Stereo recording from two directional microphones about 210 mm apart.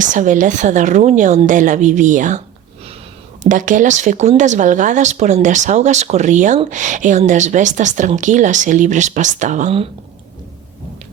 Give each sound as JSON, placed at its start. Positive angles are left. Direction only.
{"t": 0.0, "sound": "speech", "side_deg": -35}
{"t": 3.4, "sound": "speech", "side_deg": -35}